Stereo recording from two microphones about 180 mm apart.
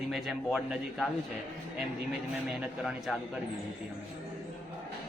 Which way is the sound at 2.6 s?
Centre (ahead or behind).